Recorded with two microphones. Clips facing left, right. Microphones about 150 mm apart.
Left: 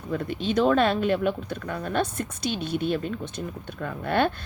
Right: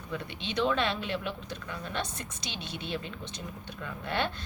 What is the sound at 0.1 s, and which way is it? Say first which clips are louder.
A woman's voice: left 10 dB; 45° left (ahead or behind).